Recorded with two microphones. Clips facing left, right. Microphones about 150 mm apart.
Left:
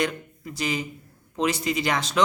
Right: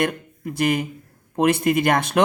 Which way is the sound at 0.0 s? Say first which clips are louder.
Right 4 dB; 55° right (ahead or behind).